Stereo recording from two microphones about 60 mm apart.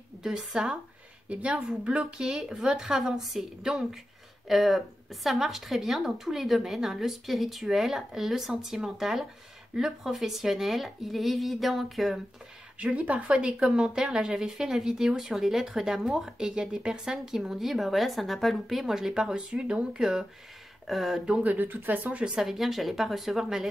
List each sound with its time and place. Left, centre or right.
0.2 s speech: centre
12.7 s speech: right; by 21.2 s centre
21.3 s speech: right
22.2 s speech: centre